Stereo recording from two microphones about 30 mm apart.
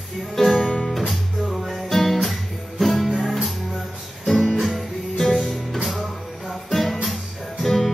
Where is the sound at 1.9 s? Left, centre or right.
Centre.